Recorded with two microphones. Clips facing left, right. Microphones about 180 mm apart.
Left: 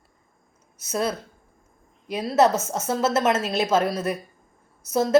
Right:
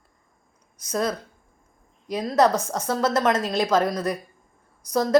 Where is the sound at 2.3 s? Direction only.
25° left (ahead or behind).